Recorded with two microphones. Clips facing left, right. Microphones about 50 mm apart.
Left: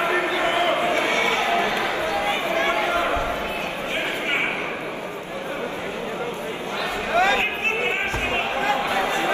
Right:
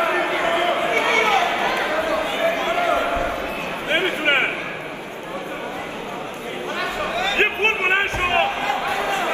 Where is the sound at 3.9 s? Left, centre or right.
Right.